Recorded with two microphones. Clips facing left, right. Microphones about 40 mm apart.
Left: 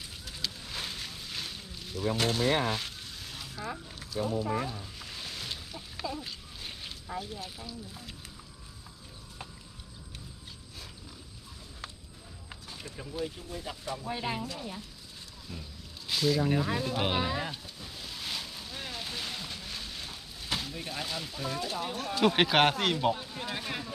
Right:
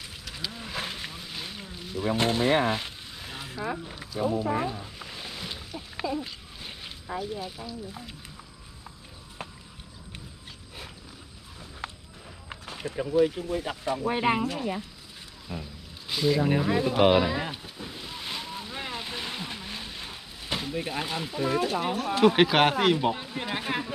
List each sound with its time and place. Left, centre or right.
0.7 s boat: right
1.3 s a sound: centre
4.3 s music: right
6.0 s a sound: centre
9.4 s a sound: right
12.6 s run: right
13.1 s speech: right
15.5 s speech: right
17.2 s boat: right
22.2 s speech: centre
23.1 s speech: right